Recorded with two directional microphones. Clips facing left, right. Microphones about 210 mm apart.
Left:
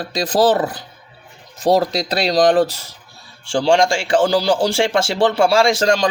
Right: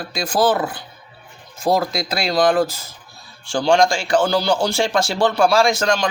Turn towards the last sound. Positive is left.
turn(degrees=30)  # may be behind; listen again after turning